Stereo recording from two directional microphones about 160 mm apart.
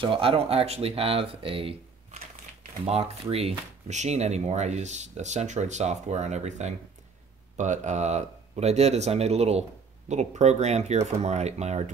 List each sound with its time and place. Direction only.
0.0 s speech: 35° right (ahead or behind)
2.8 s speech: 40° right (ahead or behind)